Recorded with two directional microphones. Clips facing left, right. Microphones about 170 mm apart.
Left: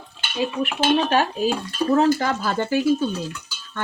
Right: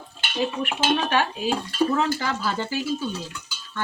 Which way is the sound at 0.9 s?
40° left (ahead or behind).